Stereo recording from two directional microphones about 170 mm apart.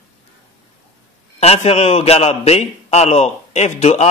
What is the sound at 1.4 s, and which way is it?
A man's voice, 35° left (ahead or behind).